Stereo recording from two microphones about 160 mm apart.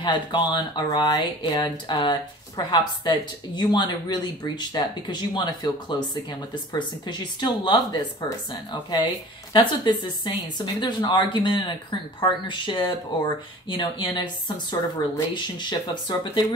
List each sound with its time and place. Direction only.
0.0 s speech: 30° left (ahead or behind)
9.5 s speech: 30° left (ahead or behind)